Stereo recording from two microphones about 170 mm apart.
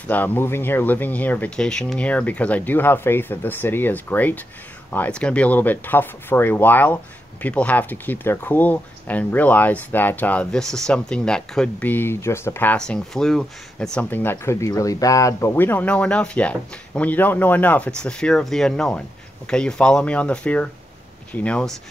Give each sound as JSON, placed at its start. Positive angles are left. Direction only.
{"t": 0.1, "sound": "speech", "side_deg": 10}